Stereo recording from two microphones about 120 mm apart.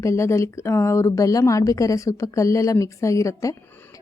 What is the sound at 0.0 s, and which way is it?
A woman's voice, 25° left (ahead or behind).